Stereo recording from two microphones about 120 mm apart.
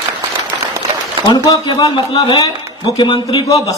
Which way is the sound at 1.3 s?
30° left (ahead or behind).